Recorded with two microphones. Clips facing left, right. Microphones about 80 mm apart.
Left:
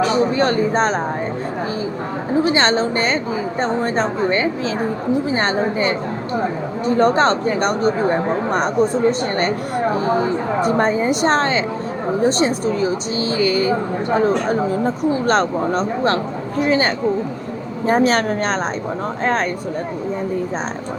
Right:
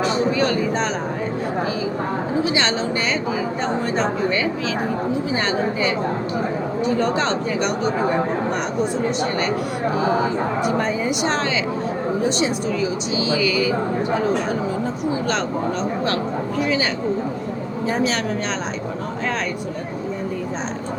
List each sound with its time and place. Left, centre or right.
0.3 s speech: left
2.4 s a woman's voice: left